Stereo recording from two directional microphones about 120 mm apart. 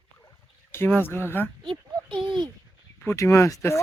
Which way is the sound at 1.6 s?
45° right (ahead or behind).